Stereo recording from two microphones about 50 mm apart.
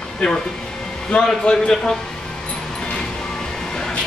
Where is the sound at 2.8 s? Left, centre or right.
Left.